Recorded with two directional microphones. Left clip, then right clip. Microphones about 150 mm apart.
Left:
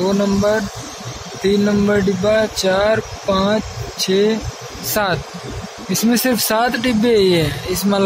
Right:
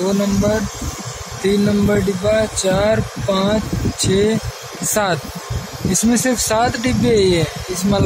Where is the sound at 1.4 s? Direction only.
10° right (ahead or behind).